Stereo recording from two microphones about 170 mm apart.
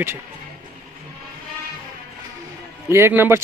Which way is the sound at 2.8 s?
15° right (ahead or behind).